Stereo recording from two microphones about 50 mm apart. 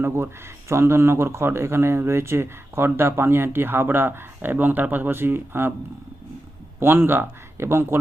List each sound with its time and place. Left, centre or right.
0.0 s speech: right
6.7 s speech: right